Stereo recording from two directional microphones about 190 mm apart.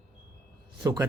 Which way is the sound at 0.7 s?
20° right (ahead or behind).